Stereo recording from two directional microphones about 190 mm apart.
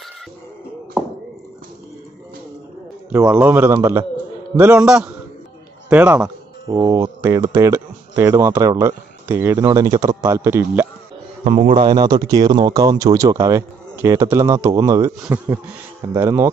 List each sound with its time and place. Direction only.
3.1 s a man's voice: 5° right (ahead or behind)
11.4 s speech: 40° right (ahead or behind)
11.7 s a man's voice: 25° right (ahead or behind)